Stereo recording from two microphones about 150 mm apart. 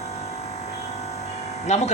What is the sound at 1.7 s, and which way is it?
Speech, 50° left (ahead or behind).